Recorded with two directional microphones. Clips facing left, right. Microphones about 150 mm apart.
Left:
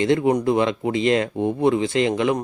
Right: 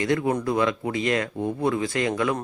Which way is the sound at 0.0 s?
25° left (ahead or behind).